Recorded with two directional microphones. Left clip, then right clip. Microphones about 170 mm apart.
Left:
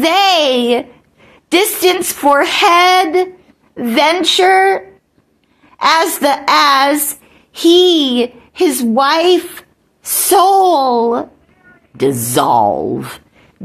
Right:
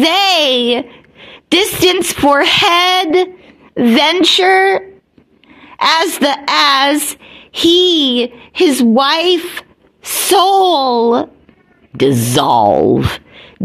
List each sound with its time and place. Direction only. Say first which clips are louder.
0.0 s a woman's voice: even; 40° right (ahead or behind)